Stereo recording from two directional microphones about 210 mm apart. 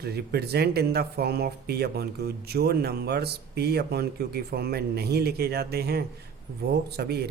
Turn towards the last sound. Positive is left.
turn(degrees=-50)  # may be behind; listen again after turning